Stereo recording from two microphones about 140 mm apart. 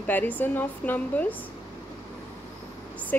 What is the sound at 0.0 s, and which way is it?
A woman's voice, 10° left (ahead or behind).